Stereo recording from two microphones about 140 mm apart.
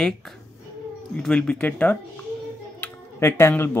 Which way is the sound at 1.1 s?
5° left (ahead or behind).